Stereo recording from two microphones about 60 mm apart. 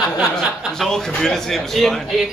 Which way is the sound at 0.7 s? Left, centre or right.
Centre.